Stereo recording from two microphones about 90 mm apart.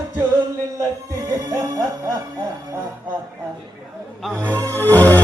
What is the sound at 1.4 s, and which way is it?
Music, 40° right (ahead or behind).